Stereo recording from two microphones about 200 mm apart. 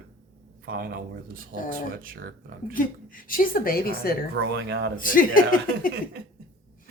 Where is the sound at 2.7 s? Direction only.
45° left (ahead or behind).